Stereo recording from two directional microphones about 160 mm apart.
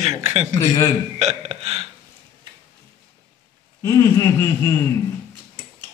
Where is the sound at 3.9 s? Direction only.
20° left (ahead or behind).